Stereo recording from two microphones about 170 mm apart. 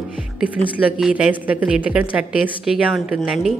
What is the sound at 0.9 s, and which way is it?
A woman's voice, 5° right (ahead or behind).